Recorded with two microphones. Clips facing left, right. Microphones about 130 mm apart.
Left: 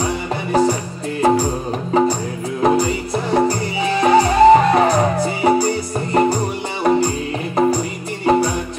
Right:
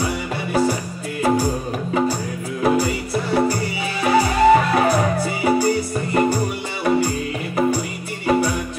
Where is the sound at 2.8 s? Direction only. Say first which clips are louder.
Left 2 dB; 40° left (ahead or behind).